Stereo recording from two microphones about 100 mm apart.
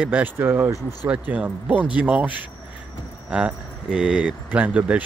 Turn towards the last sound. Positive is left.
turn(degrees=-15)  # may be behind; listen again after turning